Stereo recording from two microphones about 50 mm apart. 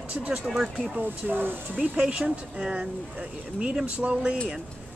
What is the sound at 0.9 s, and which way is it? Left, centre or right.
Speech, right.